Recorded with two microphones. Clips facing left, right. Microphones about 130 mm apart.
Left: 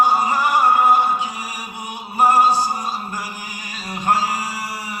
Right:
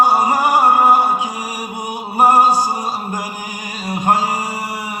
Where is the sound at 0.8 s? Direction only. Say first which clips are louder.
Right 3 dB; 45° right (ahead or behind).